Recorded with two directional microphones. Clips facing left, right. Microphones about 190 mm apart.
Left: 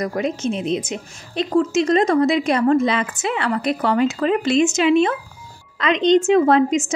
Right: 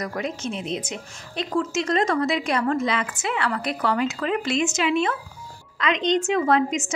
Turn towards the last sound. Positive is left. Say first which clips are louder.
# left 6 dB
turn(degrees=25)  # may be behind; listen again after turning